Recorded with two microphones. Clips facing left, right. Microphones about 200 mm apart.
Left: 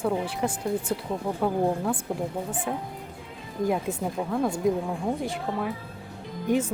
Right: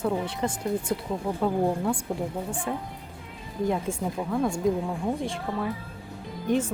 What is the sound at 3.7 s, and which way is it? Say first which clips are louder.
Speech: left 1 dB; 5° left (ahead or behind).